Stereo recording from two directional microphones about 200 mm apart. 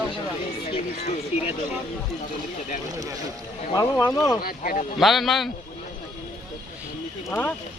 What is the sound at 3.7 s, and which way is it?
Speech, 15° left (ahead or behind).